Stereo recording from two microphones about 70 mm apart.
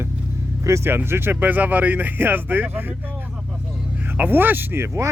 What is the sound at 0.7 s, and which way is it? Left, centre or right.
Speech, right.